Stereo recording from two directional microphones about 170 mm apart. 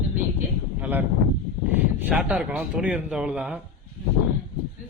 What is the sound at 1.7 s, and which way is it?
Speech, 5° right (ahead or behind).